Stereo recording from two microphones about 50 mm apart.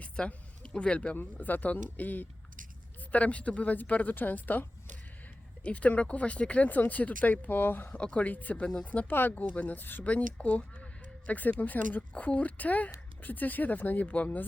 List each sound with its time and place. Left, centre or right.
0.0 s a sound: left
1.1 s speech: left
5.6 s speech: left
7.9 s speech: left
9.0 s speech: left
10.0 s speech: left
11.3 s speech: left